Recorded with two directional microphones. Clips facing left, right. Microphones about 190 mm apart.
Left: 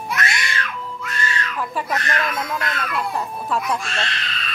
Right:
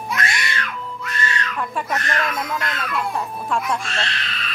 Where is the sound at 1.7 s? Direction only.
Centre (ahead or behind).